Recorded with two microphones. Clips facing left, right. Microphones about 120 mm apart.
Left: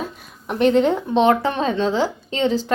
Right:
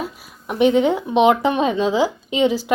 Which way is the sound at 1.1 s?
15° right (ahead or behind).